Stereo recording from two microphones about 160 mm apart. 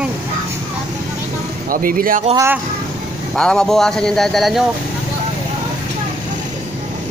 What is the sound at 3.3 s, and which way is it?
A man's voice, 5° left (ahead or behind).